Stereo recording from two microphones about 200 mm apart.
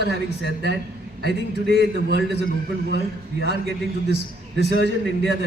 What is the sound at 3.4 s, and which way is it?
Speech, 55° right (ahead or behind).